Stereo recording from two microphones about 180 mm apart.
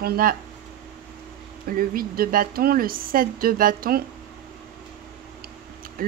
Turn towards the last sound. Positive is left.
turn(degrees=-55)  # may be behind; listen again after turning